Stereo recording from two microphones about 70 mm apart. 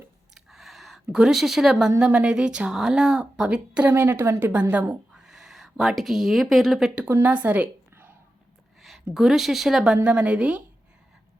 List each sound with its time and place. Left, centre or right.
0.3 s a sound: centre
1.1 s speech: centre
3.8 s a woman's voice: right
5.1 s speech: centre
7.0 s a woman's voice: right
9.1 s speech: centre